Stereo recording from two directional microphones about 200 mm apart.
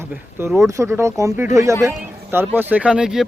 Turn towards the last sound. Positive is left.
turn(degrees=-5)  # may be behind; listen again after turning